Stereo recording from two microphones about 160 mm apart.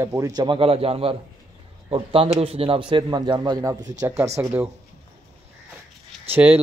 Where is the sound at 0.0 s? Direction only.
20° right (ahead or behind).